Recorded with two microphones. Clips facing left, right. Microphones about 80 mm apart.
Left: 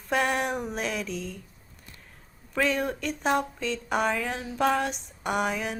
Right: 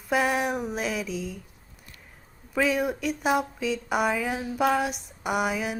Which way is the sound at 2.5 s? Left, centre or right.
Centre.